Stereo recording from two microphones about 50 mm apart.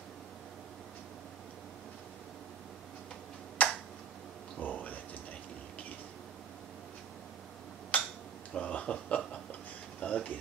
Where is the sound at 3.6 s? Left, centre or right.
Left.